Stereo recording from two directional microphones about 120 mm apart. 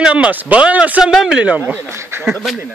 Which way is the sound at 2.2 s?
Centre (ahead or behind).